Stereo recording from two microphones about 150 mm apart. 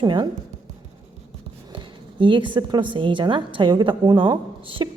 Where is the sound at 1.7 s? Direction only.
35° right (ahead or behind).